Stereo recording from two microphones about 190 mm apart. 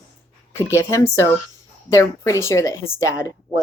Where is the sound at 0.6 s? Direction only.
15° left (ahead or behind).